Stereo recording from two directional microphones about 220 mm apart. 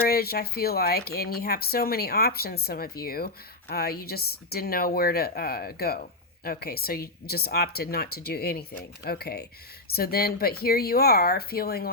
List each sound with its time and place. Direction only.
0.0 s speech: 45° left (ahead or behind)